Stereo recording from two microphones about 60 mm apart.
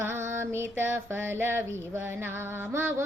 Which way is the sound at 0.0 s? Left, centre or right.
Right.